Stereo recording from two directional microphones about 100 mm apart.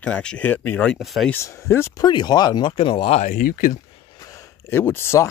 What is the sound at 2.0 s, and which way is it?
Speech, 45° left (ahead or behind).